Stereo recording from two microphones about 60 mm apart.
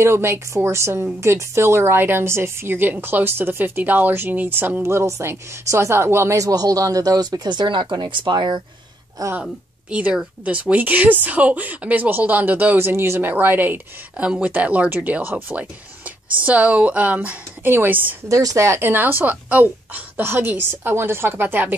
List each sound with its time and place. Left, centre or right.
0.0 s a woman's voice: right
4.8 s speech: right
6.3 s speech: right
9.4 s a woman's voice: right
12.7 s speech: right
13.3 s a woman's voice: right
14.1 s speech: centre
17.6 s a woman's voice: right
18.3 s speech: right
18.9 s a woman's voice: right